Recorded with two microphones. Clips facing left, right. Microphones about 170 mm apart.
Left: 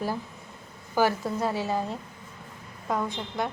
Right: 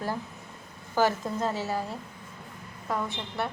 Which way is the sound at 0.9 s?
10° left (ahead or behind).